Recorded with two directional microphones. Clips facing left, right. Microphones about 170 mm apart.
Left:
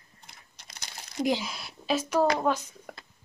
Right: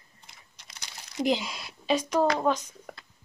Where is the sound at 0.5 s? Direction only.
45° left (ahead or behind).